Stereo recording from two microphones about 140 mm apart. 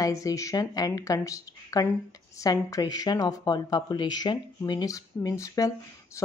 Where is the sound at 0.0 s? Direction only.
25° left (ahead or behind).